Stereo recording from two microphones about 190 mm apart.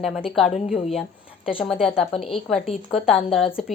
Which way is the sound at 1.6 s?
Centre (ahead or behind).